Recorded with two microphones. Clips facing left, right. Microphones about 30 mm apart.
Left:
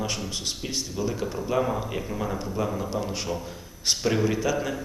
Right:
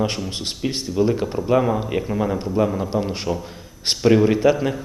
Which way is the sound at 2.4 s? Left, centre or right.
Right.